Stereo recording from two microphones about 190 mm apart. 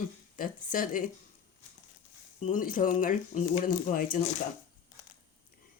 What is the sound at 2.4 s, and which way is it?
Speech, 45° left (ahead or behind).